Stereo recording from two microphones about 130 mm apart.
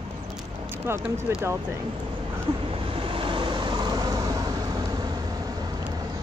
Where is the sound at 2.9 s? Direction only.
45° right (ahead or behind).